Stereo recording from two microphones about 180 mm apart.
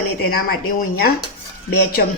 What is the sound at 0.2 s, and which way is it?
Speech, 60° left (ahead or behind).